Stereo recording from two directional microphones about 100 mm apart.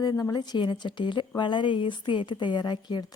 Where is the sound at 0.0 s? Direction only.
40° left (ahead or behind).